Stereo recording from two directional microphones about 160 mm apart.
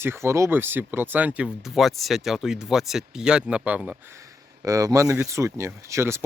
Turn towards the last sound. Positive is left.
turn(degrees=-15)  # may be behind; listen again after turning